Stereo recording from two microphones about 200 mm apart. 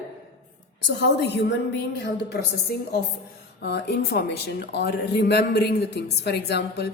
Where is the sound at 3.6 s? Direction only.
55° left (ahead or behind).